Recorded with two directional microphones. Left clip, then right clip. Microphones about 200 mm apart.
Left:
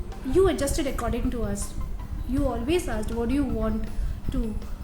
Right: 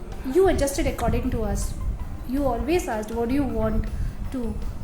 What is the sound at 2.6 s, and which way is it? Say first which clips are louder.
A woman's voice: right 2 dB; 15° left (ahead or behind).